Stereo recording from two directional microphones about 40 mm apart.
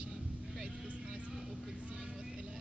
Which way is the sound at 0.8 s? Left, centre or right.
Right.